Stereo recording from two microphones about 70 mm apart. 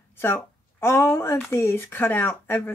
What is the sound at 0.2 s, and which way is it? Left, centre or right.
Speech, left.